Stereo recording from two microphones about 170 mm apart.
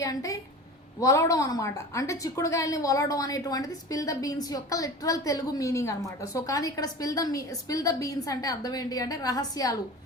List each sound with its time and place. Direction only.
0.0 s a woman's voice: 20° left (ahead or behind)